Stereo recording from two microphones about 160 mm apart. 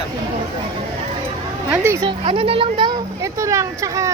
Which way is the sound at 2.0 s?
35° right (ahead or behind).